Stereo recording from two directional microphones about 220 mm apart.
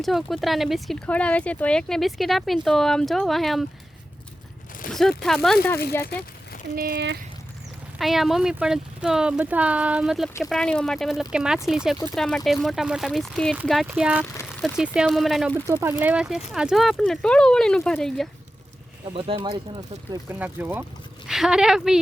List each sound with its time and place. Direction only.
0.0 s speech: centre (ahead or behind)
4.9 s speech: centre (ahead or behind)
6.7 s speech: 45° right (ahead or behind)
7.9 s speech: centre (ahead or behind)
15.6 s speech: 10° right (ahead or behind)
19.0 s speech: 25° right (ahead or behind)
20.2 s speech: 10° right (ahead or behind)